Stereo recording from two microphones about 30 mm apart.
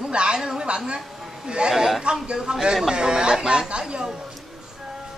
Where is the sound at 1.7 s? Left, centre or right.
Centre.